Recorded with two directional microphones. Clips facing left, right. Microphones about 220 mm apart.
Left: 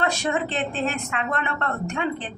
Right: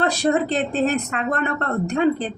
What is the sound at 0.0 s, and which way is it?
A woman's voice, 35° right (ahead or behind).